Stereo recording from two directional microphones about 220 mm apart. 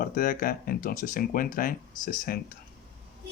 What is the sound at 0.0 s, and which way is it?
Speech, 40° left (ahead or behind).